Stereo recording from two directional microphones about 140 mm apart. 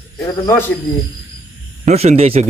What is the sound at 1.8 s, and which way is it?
Speech, 50° right (ahead or behind).